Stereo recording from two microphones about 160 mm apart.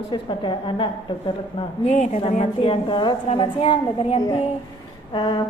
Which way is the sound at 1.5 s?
40° left (ahead or behind).